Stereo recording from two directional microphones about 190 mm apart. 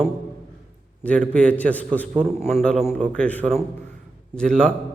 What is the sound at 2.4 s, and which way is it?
Speech, 35° right (ahead or behind).